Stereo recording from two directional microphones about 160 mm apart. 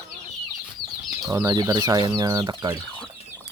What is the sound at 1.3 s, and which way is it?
Speech, 25° right (ahead or behind).